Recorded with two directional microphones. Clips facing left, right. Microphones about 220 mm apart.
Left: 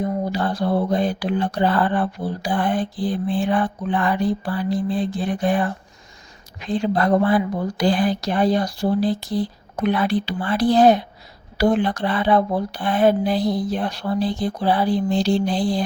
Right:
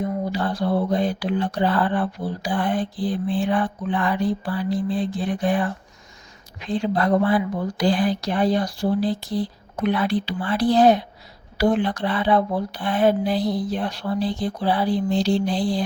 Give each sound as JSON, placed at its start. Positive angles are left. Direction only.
{"t": 0.0, "sound": "speech", "side_deg": 45}